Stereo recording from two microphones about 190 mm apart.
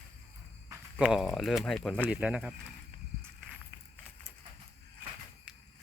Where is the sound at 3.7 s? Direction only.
25° left (ahead or behind).